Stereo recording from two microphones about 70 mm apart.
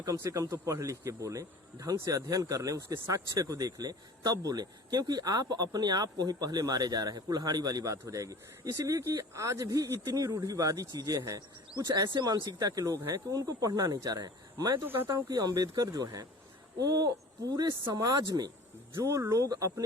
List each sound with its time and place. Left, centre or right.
0.3 s speech: right
12.1 s speech: right
12.5 s speech: right
14.8 s speech: right
15.3 s speech: right
18.9 s speech: right